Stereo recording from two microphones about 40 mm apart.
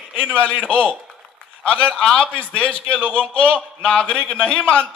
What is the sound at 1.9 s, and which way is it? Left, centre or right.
Speech, centre.